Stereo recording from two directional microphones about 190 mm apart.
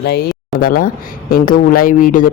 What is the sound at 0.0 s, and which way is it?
Speech, 55° left (ahead or behind).